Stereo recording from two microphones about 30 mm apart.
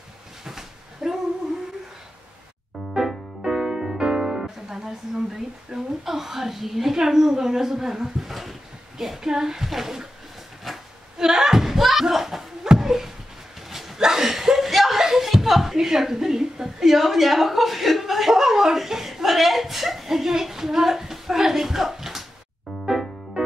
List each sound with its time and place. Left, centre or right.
0.5 s dog: centre
3.4 s music: centre
5.7 s a sound: right
6.0 s a sound: centre
7.0 s a woman's voice: centre
11.1 s slam: centre
12.7 s a sound: centre
13.9 s chuckle: centre
22.8 s music: centre